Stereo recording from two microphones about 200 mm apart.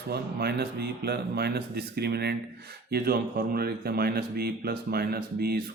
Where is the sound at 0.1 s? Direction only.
50° right (ahead or behind).